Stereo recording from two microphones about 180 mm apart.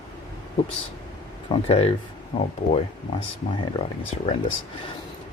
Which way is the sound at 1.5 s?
35° left (ahead or behind).